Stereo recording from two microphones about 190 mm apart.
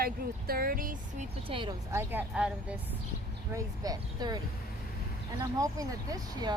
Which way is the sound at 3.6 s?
20° right (ahead or behind).